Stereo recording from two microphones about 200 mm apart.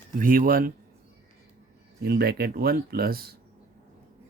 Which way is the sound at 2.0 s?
50° right (ahead or behind).